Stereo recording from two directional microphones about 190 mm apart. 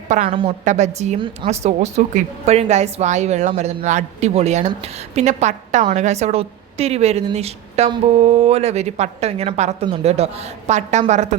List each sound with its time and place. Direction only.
0.3 s a woman's voice: 30° right (ahead or behind)